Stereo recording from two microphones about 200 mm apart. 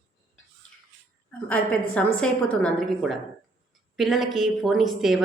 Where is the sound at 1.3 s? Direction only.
5° left (ahead or behind).